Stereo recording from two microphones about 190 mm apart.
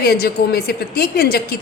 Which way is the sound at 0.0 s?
55° left (ahead or behind).